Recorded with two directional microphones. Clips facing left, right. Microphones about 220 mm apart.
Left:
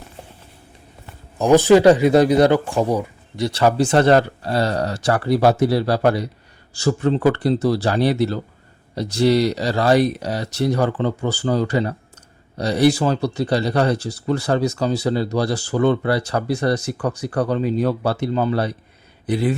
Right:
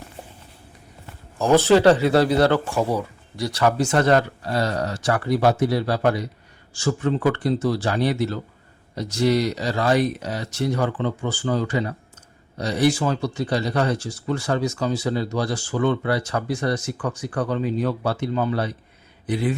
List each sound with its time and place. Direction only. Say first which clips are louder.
1.4 s speech: left 4 dB; 15° left (ahead or behind); by 19.5 s 35° left (ahead or behind)